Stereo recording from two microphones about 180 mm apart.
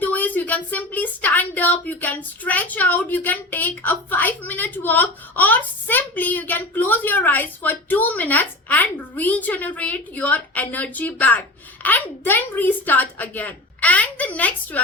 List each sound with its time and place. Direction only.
0.0 s a woman's voice: 10° left (ahead or behind)